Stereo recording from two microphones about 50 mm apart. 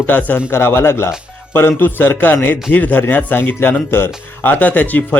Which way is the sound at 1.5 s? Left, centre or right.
Left.